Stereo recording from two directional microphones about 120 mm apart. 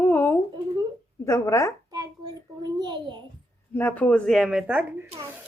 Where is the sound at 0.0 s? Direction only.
20° left (ahead or behind).